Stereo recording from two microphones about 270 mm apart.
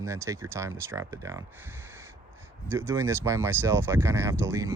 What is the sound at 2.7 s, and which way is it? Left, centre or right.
Speech, centre.